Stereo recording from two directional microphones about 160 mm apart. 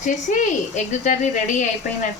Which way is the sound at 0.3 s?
50° left (ahead or behind).